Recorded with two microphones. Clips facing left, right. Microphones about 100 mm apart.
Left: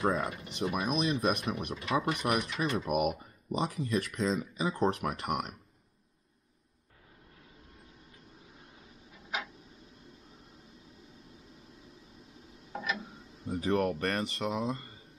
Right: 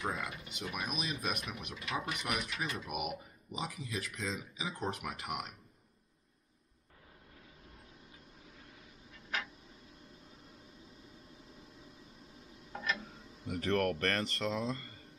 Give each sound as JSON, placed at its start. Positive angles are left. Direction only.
{"t": 0.1, "sound": "speech", "side_deg": 35}
{"t": 12.7, "sound": "tick-tock", "side_deg": 10}
{"t": 13.6, "sound": "speech", "side_deg": 15}